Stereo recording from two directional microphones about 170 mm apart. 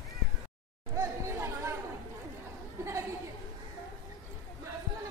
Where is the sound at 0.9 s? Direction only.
15° right (ahead or behind).